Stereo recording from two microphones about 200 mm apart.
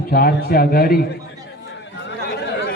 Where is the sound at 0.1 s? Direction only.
50° left (ahead or behind).